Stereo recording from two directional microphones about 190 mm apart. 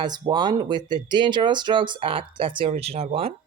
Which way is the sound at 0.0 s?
25° right (ahead or behind).